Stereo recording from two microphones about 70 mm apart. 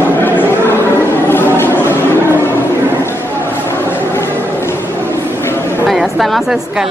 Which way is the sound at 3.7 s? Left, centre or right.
Left.